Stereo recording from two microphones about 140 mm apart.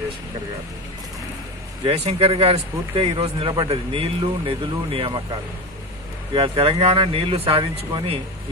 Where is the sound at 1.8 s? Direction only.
45° right (ahead or behind).